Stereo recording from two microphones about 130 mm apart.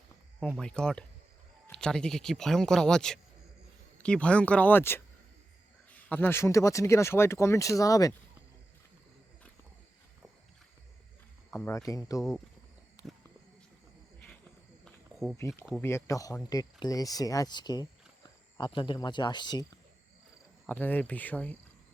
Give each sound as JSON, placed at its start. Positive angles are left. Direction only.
{"t": 0.6, "sound": "speech", "side_deg": 5}
{"t": 11.5, "sound": "speech", "side_deg": 20}
{"t": 13.0, "sound": "a sound", "side_deg": 25}
{"t": 14.8, "sound": "cricket", "side_deg": 0}
{"t": 15.4, "sound": "speech", "side_deg": 20}
{"t": 20.7, "sound": "speech", "side_deg": 15}